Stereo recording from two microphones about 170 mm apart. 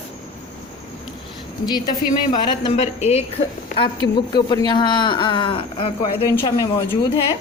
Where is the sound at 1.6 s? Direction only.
25° left (ahead or behind).